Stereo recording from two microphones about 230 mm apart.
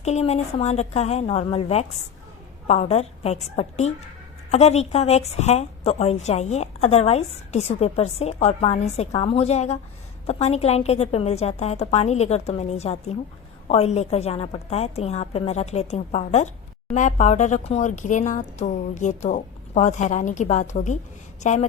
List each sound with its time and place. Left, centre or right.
0.0 s a woman's voice: left